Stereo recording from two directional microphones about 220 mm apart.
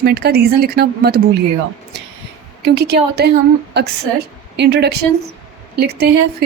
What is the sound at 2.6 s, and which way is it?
Speech, 50° right (ahead or behind).